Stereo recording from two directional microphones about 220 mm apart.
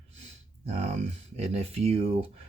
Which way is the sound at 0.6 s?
25° right (ahead or behind).